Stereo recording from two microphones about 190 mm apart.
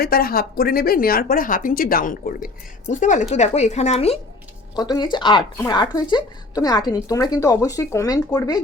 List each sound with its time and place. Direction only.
0.0 s speech: 55° left (ahead or behind); by 4.2 s 35° left (ahead or behind)
4.7 s speech: 20° left (ahead or behind)